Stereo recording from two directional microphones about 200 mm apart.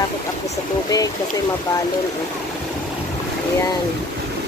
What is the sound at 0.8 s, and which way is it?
Speech, 15° left (ahead or behind).